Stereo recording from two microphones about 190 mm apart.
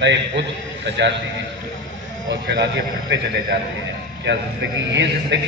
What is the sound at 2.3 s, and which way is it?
Speech, 65° right (ahead or behind).